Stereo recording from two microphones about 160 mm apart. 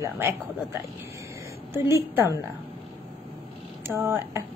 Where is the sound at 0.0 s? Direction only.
15° right (ahead or behind).